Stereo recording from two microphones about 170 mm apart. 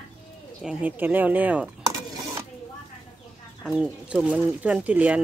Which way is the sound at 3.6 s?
5° right (ahead or behind).